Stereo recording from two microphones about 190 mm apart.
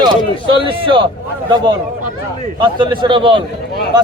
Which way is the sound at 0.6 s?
25° right (ahead or behind).